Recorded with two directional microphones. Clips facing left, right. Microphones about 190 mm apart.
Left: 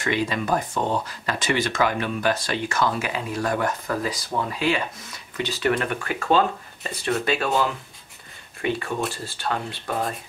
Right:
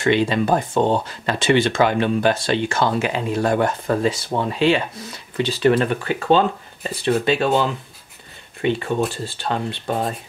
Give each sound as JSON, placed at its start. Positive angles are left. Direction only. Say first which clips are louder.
{"t": 0.0, "sound": "speech", "louder": "right 7 dB", "side_deg": -25}